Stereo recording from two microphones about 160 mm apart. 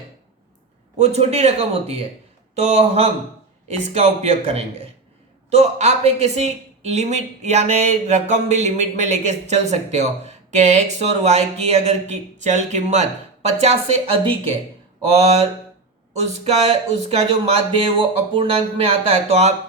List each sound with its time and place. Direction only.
0.9 s speech: 40° right (ahead or behind)
15.0 s speech: 40° right (ahead or behind)